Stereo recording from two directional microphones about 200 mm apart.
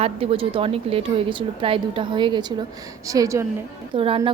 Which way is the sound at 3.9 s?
25° right (ahead or behind).